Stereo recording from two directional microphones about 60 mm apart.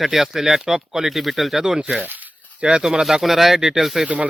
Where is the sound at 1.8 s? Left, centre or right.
Centre.